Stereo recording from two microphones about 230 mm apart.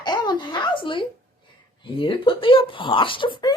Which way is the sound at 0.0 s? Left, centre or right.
Centre.